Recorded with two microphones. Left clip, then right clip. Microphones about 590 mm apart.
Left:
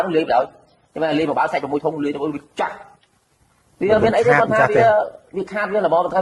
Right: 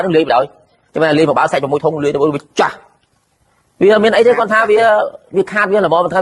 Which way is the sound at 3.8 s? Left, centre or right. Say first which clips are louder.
Right 6 dB; right.